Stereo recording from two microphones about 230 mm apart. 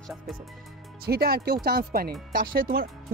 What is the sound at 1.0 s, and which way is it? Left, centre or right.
Speech, right.